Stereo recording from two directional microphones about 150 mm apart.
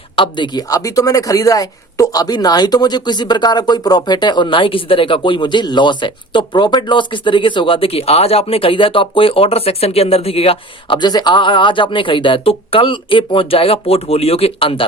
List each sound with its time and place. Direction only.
0.2 s a woman's voice: 30° left (ahead or behind)